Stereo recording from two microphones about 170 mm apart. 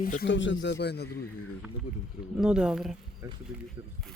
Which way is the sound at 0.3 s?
90° left.